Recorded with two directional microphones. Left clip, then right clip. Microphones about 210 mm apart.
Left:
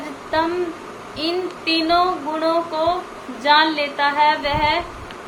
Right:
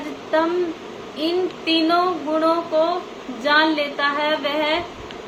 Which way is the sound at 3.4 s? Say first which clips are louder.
Left 2 dB; 15° left (ahead or behind).